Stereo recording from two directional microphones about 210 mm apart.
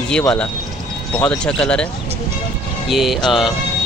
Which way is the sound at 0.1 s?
5° left (ahead or behind).